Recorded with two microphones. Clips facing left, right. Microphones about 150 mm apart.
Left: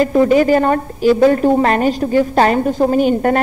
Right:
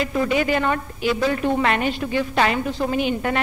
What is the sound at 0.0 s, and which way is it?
A woman's voice, 40° left (ahead or behind).